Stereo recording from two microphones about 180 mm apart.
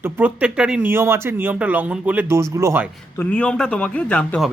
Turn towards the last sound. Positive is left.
turn(degrees=5)  # may be behind; listen again after turning